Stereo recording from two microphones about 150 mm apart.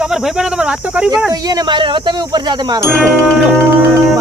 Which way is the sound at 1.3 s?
25° right (ahead or behind).